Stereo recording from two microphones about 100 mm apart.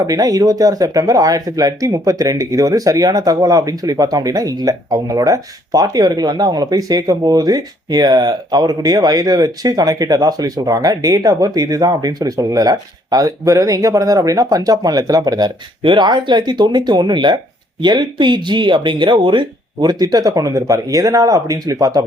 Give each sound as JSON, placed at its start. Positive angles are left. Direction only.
{"t": 0.1, "sound": "speech", "side_deg": -40}